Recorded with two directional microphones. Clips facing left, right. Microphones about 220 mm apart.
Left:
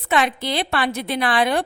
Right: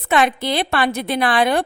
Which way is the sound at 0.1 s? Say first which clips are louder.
Right 3 dB; 50° right (ahead or behind).